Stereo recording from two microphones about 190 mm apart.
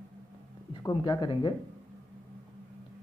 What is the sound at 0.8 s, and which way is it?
Speech, 20° left (ahead or behind).